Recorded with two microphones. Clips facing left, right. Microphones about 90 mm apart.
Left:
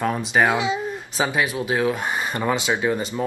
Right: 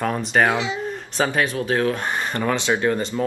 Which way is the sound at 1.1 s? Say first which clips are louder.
Right 2 dB; 5° left (ahead or behind).